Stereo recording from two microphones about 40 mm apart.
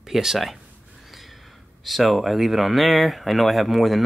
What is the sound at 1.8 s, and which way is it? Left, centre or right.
Speech, centre.